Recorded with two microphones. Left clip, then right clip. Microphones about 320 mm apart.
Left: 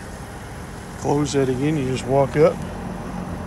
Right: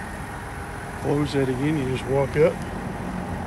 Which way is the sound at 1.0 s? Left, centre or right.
Centre.